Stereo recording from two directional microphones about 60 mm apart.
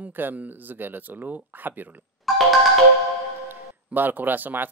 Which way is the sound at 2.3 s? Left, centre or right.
Centre.